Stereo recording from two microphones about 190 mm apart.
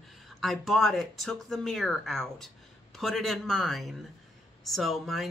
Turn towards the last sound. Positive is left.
turn(degrees=0)  # may be behind; listen again after turning